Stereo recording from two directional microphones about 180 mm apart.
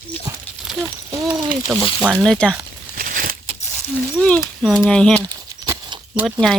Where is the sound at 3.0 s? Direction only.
50° right (ahead or behind).